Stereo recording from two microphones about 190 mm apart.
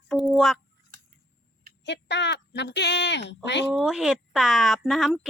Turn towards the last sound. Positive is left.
turn(degrees=0)  # may be behind; listen again after turning